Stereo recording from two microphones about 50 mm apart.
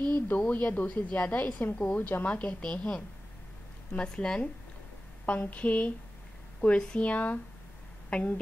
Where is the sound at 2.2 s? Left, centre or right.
Left.